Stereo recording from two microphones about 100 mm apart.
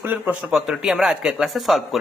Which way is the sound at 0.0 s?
15° right (ahead or behind).